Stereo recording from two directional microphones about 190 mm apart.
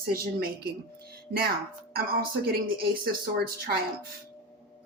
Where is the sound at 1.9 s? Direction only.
50° right (ahead or behind).